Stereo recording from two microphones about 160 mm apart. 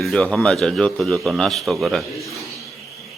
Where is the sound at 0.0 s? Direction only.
5° left (ahead or behind).